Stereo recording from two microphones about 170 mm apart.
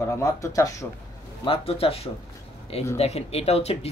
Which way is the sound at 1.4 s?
35° left (ahead or behind).